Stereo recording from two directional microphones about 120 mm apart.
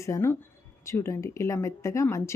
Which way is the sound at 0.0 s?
25° left (ahead or behind).